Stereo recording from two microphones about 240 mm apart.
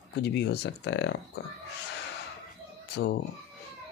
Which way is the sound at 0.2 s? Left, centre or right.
Left.